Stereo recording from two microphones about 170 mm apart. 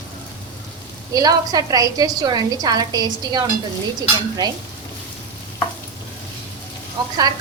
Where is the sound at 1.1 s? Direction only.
20° right (ahead or behind).